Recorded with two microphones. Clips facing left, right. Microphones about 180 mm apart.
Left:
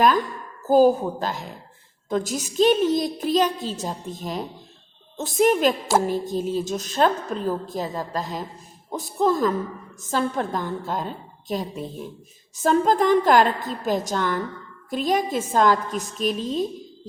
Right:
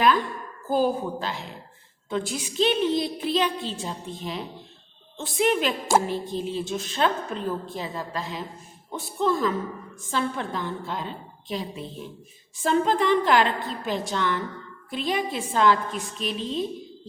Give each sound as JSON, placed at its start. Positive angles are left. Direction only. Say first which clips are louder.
{"t": 0.0, "sound": "a woman's voice", "louder": "left 2 dB", "side_deg": 45}